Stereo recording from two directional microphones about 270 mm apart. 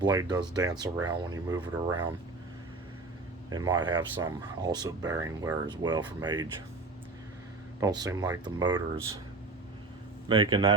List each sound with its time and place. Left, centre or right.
0.0 s speech: centre
3.5 s speech: centre
7.8 s speech: centre
10.2 s speech: centre